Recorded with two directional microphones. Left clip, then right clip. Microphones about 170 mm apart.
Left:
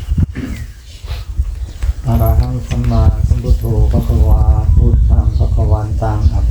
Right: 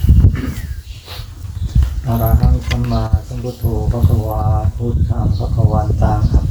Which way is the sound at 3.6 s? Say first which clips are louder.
Left 2 dB; 10° right (ahead or behind).